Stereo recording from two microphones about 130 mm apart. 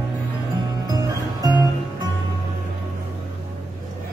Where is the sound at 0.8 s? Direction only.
30° right (ahead or behind).